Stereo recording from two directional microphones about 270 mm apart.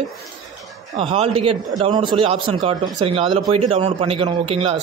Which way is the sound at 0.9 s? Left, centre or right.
Right.